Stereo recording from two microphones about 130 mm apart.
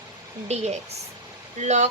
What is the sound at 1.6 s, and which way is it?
Speech, 60° right (ahead or behind).